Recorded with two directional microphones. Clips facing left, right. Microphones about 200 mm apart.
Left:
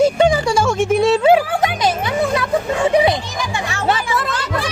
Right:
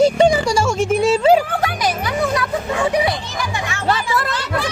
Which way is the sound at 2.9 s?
20° left (ahead or behind).